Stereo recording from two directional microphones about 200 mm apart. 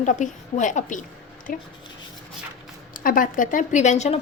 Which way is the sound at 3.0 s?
45° left (ahead or behind).